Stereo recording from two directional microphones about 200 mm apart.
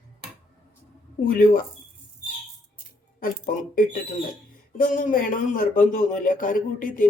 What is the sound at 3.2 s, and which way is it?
A man's voice, 45° left (ahead or behind).